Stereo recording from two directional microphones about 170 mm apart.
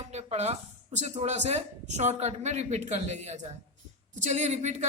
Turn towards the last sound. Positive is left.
turn(degrees=-40)  # may be behind; listen again after turning